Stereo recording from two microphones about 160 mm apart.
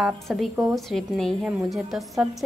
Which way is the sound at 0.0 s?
Centre (ahead or behind).